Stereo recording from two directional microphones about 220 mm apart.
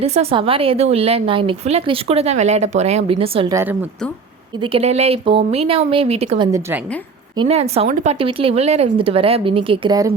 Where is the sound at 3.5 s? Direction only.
10° right (ahead or behind).